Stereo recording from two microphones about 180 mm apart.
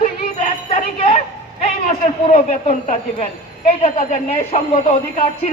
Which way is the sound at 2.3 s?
40° left (ahead or behind).